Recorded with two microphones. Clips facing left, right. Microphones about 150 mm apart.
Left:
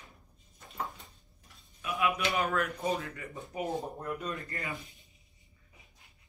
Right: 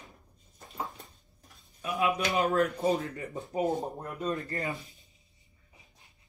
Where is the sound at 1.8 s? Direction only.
25° right (ahead or behind).